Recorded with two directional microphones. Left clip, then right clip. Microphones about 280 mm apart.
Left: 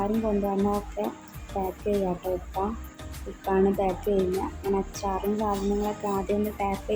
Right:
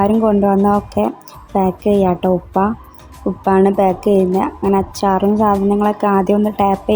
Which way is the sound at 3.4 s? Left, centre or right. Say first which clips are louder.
Right 11 dB; right.